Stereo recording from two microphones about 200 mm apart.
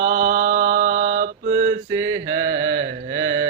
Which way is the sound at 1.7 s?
15° right (ahead or behind).